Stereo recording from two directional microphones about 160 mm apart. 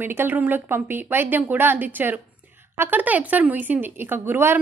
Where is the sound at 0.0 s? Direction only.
15° right (ahead or behind).